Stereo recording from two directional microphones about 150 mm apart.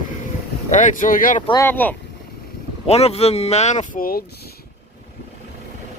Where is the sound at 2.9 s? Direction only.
45° left (ahead or behind); by 4.2 s 70° left (ahead or behind).